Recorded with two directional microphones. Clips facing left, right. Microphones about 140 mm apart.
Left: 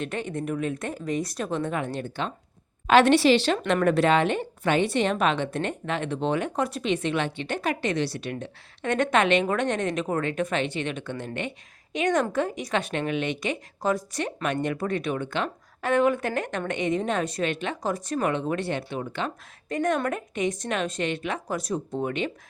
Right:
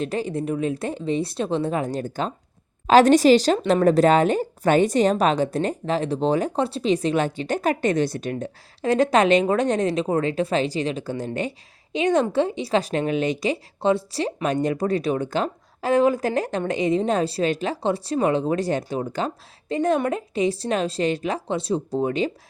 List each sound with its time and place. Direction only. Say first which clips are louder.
0.0 s a woman's voice: right 5 dB; 35° right (ahead or behind)